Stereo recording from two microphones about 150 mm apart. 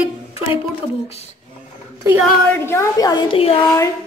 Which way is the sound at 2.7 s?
20° left (ahead or behind).